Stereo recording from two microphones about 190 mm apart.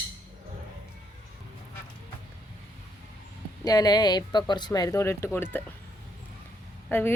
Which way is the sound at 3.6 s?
20° left (ahead or behind).